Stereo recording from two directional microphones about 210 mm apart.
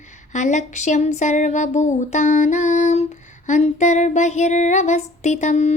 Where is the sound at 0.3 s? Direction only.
35° left (ahead or behind).